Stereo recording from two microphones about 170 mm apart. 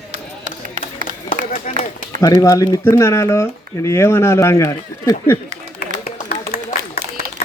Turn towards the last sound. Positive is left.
turn(degrees=60)  # may be behind; listen again after turning